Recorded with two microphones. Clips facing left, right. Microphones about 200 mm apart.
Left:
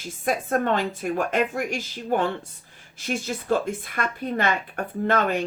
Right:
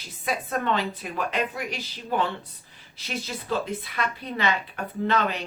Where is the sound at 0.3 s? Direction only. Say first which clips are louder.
Left 4 dB; 50° left (ahead or behind).